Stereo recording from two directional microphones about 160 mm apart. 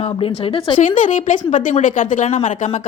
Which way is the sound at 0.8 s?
55° left (ahead or behind).